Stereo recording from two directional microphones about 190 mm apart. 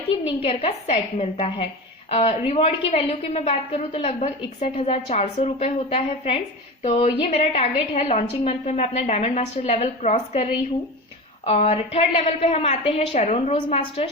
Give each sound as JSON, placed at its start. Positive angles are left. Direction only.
{"t": 0.1, "sound": "a woman's voice", "side_deg": 30}